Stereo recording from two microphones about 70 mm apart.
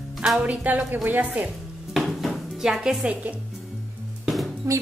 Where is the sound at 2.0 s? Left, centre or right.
Centre.